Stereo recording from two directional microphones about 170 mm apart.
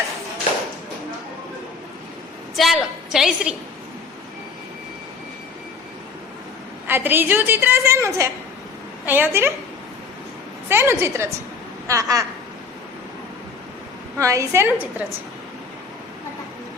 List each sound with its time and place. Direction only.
2.6 s a woman's voice: centre (ahead or behind)
6.8 s a woman's voice: 10° right (ahead or behind)
10.7 s a woman's voice: 15° right (ahead or behind)
14.2 s a woman's voice: 20° right (ahead or behind)